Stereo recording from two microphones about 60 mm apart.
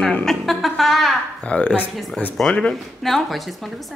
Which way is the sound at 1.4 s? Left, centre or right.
Left.